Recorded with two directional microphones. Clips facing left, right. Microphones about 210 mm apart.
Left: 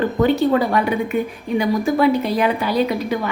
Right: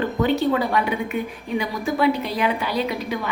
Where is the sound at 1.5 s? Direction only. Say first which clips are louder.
Left 6 dB; 45° left (ahead or behind).